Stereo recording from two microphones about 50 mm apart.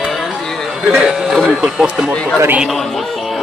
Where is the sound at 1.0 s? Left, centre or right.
Centre.